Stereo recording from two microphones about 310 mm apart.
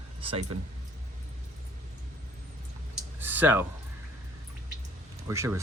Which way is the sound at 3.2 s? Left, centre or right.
Centre.